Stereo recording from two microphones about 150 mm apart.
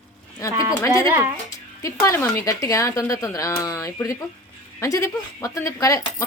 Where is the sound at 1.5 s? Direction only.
20° left (ahead or behind).